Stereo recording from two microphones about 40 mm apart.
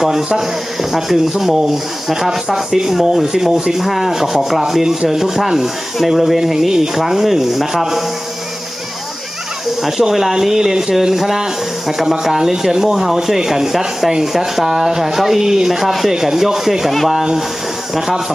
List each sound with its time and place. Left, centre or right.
0.0 s rub: centre
3.5 s speech: centre
3.8 s rub: centre
10.0 s rub: centre